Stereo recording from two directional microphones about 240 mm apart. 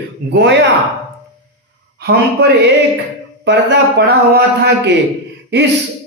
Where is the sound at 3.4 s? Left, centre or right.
Right.